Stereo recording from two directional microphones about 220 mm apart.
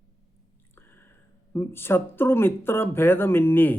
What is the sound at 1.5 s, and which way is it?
Speech, 10° left (ahead or behind).